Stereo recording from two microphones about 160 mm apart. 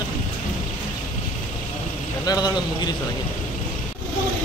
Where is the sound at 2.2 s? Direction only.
25° left (ahead or behind).